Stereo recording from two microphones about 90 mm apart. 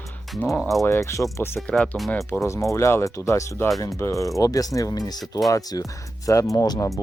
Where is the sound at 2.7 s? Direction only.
30° left (ahead or behind).